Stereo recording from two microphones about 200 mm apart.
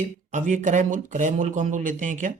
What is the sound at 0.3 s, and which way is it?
Speech, 40° right (ahead or behind).